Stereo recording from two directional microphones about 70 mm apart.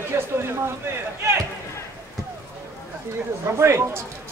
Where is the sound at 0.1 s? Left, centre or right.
Right.